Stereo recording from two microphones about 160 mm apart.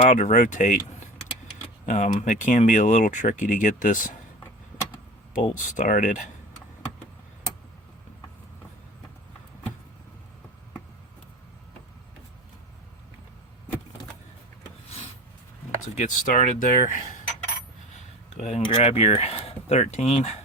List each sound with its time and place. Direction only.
0.1 s speech: 50° left (ahead or behind)
1.9 s speech: 50° left (ahead or behind)
5.3 s speech: 50° left (ahead or behind)
16.0 s speech: 50° left (ahead or behind)
18.3 s speech: 40° left (ahead or behind)